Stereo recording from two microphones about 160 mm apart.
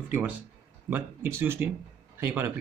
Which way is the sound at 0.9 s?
15° right (ahead or behind).